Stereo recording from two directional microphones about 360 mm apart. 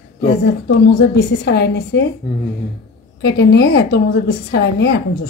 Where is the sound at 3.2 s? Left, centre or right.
Left.